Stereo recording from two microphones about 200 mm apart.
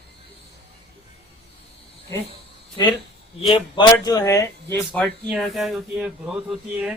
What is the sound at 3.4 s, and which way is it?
Speech, 25° left (ahead or behind).